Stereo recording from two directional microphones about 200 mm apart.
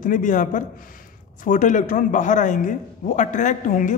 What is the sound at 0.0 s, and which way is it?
A man's voice, 40° left (ahead or behind).